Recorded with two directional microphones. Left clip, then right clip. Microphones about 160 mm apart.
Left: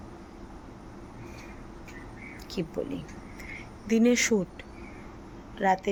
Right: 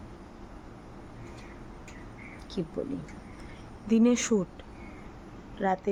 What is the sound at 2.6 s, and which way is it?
Speech, 15° right (ahead or behind).